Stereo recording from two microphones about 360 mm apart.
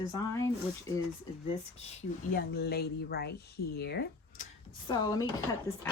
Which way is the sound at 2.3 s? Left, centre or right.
Left.